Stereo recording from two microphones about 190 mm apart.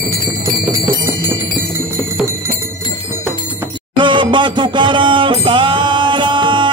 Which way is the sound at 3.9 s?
25° right (ahead or behind).